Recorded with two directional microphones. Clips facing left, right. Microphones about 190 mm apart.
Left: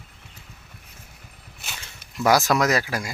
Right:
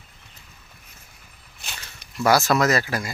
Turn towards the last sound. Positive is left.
turn(degrees=10)  # may be behind; listen again after turning